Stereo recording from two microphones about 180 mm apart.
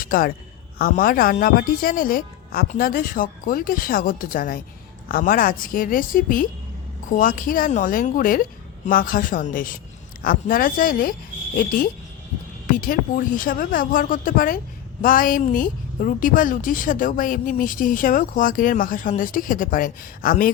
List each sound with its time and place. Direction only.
0.0 s a woman's voice: 50° left (ahead or behind)
12.7 s a woman's voice: 50° left (ahead or behind)